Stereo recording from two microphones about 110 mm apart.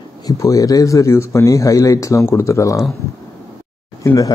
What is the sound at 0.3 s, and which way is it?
Speech, 30° left (ahead or behind).